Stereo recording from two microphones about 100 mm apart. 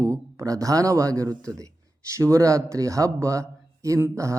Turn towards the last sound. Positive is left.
turn(degrees=-30)  # may be behind; listen again after turning